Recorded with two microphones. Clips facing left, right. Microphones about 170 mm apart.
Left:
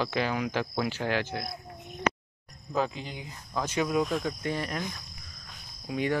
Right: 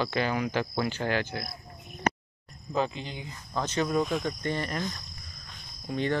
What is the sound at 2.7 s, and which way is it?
Speech, 5° left (ahead or behind).